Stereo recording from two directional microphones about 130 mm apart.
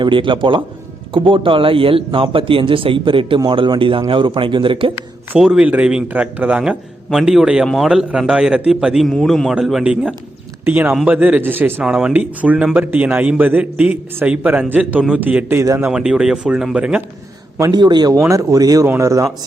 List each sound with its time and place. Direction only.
0.0 s speech: 40° right (ahead or behind)
5.4 s a man's voice: 5° right (ahead or behind); by 15.9 s 20° right (ahead or behind)
15.9 s a man's voice: 5° right (ahead or behind)
17.6 s speech: 35° right (ahead or behind)